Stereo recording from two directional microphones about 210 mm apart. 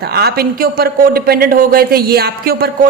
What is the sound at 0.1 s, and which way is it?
A man's voice, 50° right (ahead or behind).